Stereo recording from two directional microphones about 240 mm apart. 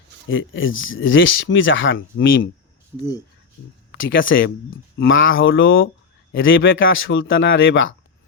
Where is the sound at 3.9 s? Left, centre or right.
Left.